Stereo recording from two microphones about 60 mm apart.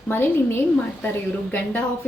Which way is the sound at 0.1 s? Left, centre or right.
Left.